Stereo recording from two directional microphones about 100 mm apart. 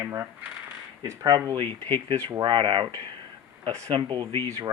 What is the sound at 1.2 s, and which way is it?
Speech, 45° right (ahead or behind).